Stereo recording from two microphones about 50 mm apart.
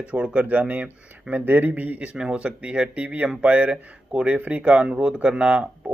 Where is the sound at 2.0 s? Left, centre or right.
Centre.